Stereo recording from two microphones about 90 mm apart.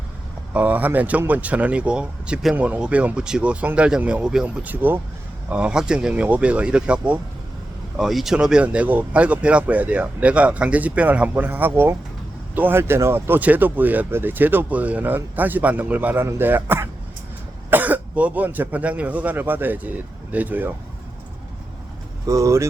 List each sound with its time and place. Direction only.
0.5 s speech: 20° right (ahead or behind)
22.3 s speech: 35° right (ahead or behind)